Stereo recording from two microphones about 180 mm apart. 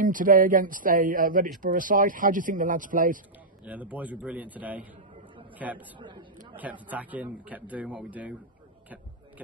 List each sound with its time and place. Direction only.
0.0 s a man's voice: 50° right (ahead or behind)
3.6 s a man's voice: 10° right (ahead or behind)